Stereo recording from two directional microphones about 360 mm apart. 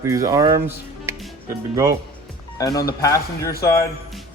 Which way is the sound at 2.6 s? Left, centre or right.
Centre.